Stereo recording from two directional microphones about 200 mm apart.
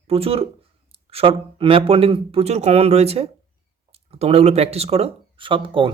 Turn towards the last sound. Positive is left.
turn(degrees=-25)  # may be behind; listen again after turning